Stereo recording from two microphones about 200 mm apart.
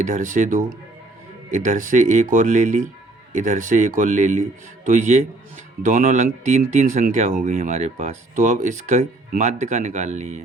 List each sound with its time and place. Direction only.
0.0 s speech: 40° right (ahead or behind)